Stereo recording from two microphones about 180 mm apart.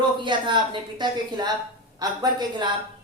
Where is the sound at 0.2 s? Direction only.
25° right (ahead or behind).